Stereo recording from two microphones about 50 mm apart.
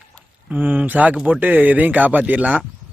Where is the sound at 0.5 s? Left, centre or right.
Right.